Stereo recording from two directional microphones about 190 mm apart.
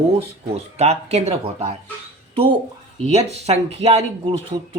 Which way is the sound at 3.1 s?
35° right (ahead or behind).